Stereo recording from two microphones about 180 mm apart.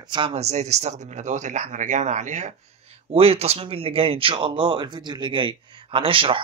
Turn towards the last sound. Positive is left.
turn(degrees=-30)  # may be behind; listen again after turning